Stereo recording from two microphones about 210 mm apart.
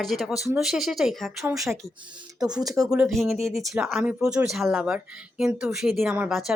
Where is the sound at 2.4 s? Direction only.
20° right (ahead or behind).